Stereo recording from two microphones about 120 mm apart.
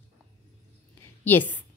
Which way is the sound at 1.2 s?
15° left (ahead or behind).